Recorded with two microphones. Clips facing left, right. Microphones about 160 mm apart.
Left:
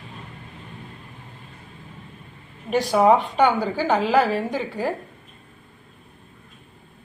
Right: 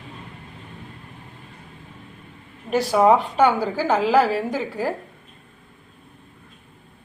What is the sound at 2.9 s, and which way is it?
A woman's voice, 5° right (ahead or behind).